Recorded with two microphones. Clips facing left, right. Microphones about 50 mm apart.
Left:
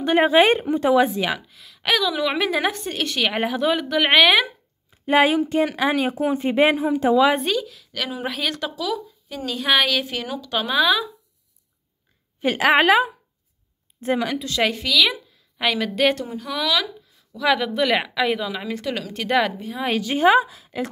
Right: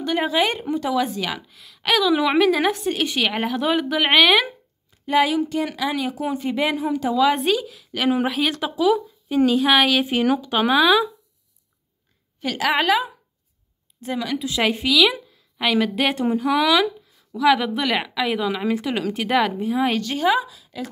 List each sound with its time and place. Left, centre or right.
0.0 s speech: left
1.5 s a woman's voice: centre
5.0 s speech: left
7.3 s a woman's voice: centre
8.7 s speech: right
9.5 s a woman's voice: centre
12.4 s speech: left
14.3 s a woman's voice: centre
16.3 s speech: centre
17.4 s a woman's voice: centre
20.2 s speech: left